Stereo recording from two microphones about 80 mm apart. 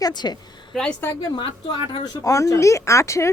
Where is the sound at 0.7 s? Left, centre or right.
Centre.